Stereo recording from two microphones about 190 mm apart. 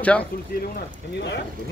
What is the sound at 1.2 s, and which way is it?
Speech, 65° left (ahead or behind).